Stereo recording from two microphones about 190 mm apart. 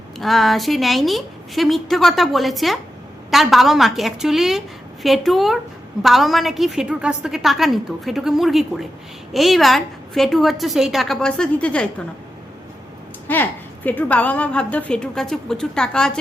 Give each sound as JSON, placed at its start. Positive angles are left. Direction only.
{"t": 0.2, "sound": "a woman's voice", "side_deg": 0}
{"t": 13.2, "sound": "a woman's voice", "side_deg": 10}